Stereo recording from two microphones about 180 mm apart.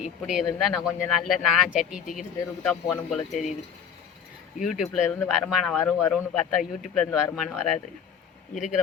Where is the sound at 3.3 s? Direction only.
40° left (ahead or behind).